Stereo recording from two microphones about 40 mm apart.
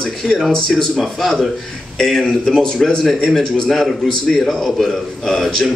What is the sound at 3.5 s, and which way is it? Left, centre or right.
Speech, centre.